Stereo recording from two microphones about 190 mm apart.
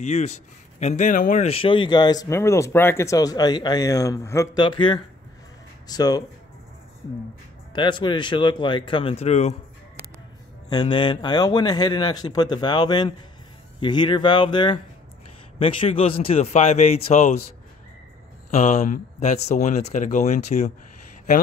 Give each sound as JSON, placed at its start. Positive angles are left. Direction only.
{"t": 0.0, "sound": "a man's voice", "side_deg": 35}
{"t": 7.7, "sound": "a man's voice", "side_deg": 25}
{"t": 10.7, "sound": "a man's voice", "side_deg": 25}
{"t": 18.5, "sound": "speech", "side_deg": 40}